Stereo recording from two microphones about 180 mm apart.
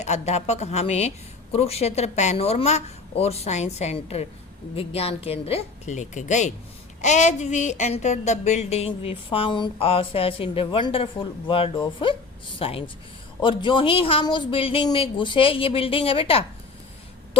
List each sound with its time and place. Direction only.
0.0 s speech: 40° left (ahead or behind)